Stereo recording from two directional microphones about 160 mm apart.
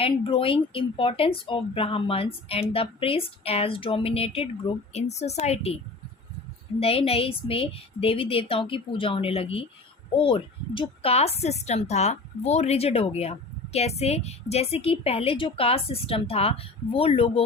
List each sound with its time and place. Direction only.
0.0 s speech: 35° left (ahead or behind)